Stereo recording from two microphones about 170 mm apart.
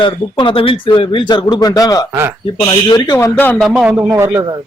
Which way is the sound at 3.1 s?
10° left (ahead or behind).